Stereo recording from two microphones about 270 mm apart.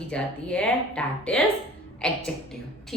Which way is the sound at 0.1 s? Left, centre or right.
Centre.